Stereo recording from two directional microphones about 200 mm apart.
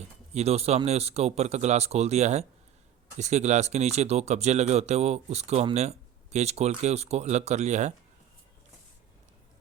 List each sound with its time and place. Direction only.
0.3 s speech: 30° right (ahead or behind)